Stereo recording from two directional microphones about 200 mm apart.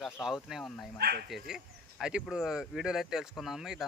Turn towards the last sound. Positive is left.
turn(degrees=0)  # may be behind; listen again after turning